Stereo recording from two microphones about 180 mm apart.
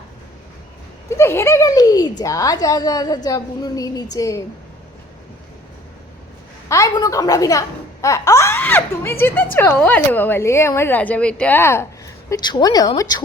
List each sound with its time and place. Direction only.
1.1 s speech: 15° left (ahead or behind)
6.7 s a woman's voice: 20° left (ahead or behind)